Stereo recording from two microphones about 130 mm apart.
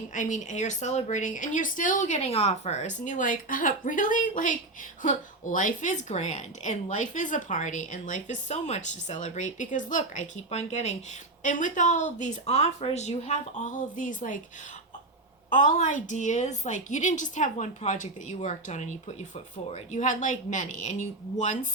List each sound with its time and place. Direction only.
0.1 s a woman's voice: 70° left (ahead or behind)
11.4 s a woman's voice: 80° left
15.4 s a woman's voice: 75° left (ahead or behind)